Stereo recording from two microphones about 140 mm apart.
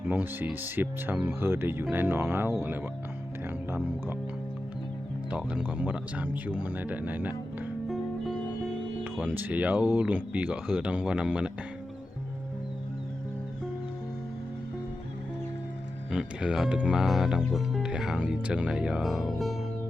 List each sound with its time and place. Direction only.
0.1 s speech: 15° right (ahead or behind)
5.3 s speech: 5° right (ahead or behind)
7.9 s music: centre (ahead or behind)
9.2 s speech: 10° right (ahead or behind)
16.1 s speech: 5° right (ahead or behind)